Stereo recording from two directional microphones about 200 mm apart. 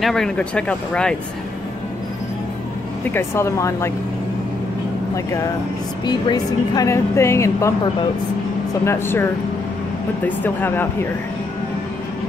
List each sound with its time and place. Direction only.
0.0 s speech: centre (ahead or behind)
3.1 s a woman's voice: 10° left (ahead or behind)
6.0 s a woman's voice: 20° left (ahead or behind)